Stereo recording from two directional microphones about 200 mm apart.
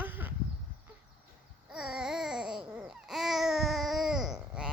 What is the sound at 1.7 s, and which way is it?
Babbling, 5° right (ahead or behind).